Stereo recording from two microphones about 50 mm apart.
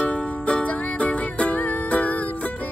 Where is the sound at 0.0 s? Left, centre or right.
Left.